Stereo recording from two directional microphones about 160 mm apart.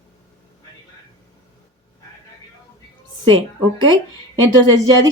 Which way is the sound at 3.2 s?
30° right (ahead or behind).